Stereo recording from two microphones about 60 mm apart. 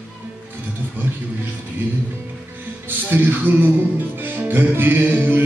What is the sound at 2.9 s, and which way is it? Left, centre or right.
Music, right.